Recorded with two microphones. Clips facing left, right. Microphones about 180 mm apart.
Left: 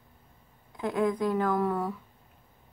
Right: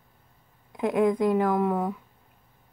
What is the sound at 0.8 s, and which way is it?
Speech, 20° right (ahead or behind).